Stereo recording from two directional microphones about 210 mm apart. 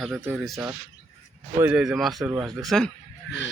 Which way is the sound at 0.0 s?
5° right (ahead or behind).